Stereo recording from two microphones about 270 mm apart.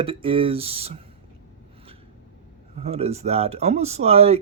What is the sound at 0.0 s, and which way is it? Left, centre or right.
Speech, centre.